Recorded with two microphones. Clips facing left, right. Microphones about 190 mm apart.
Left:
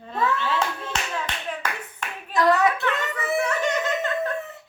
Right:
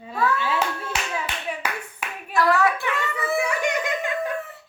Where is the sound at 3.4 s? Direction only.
10° right (ahead or behind).